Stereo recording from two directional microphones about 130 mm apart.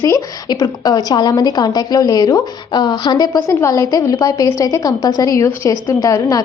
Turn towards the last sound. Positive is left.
turn(degrees=25)  # may be behind; listen again after turning